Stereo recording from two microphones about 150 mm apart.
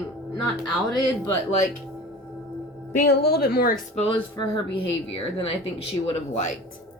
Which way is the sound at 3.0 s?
90° left.